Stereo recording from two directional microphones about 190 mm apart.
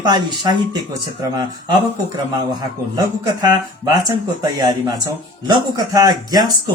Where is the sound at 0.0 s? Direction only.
20° right (ahead or behind).